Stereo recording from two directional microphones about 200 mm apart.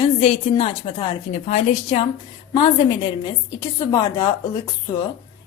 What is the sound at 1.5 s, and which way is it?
Speech, 35° left (ahead or behind).